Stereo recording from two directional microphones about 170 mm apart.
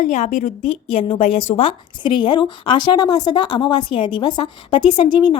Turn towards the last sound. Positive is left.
turn(degrees=25)  # may be behind; listen again after turning